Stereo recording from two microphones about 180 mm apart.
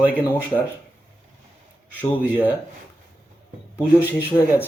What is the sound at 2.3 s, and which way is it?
Speech, 10° right (ahead or behind).